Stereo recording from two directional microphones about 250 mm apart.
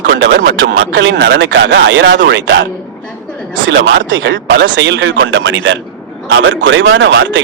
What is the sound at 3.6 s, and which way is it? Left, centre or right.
Speech, right.